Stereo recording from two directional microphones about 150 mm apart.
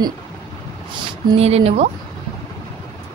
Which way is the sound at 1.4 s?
45° right (ahead or behind).